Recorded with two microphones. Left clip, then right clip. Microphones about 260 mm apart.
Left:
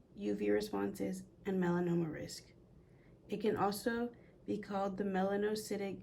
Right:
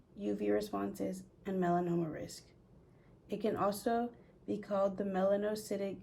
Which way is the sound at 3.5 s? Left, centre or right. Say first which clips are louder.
Right 2 dB; left.